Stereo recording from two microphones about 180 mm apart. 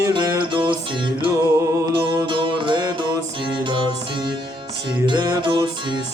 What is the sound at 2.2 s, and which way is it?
Music, 25° right (ahead or behind).